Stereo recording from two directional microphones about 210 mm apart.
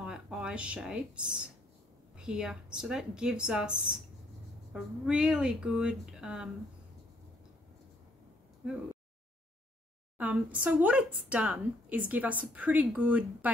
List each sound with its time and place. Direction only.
0.0 s speech: 5° right (ahead or behind)
10.1 s speech: 5° right (ahead or behind)